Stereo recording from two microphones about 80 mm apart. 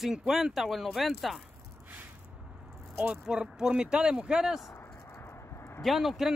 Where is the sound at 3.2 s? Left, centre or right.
Centre.